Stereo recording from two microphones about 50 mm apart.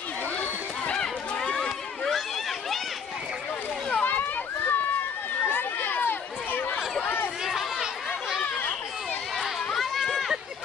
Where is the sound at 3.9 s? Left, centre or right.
Left.